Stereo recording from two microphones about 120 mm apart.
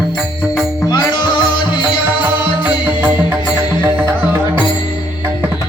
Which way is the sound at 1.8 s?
10° right (ahead or behind).